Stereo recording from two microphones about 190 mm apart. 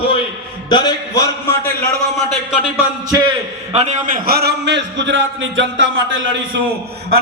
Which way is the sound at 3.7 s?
35° right (ahead or behind).